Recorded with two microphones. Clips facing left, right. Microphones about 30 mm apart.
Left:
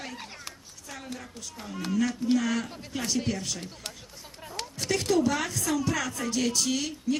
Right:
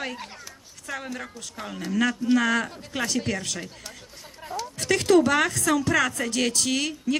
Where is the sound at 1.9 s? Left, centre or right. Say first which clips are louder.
Right 3 dB; right.